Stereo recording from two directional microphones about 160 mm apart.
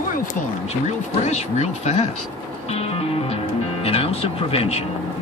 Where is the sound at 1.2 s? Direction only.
45° left (ahead or behind).